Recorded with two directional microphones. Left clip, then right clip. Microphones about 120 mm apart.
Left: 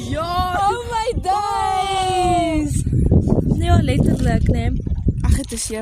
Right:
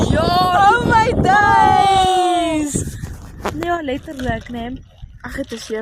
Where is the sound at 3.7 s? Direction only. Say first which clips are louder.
Left 5 dB; 50° left (ahead or behind).